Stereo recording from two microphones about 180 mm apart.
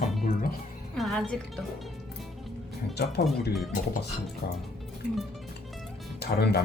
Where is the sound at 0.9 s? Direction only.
Centre (ahead or behind).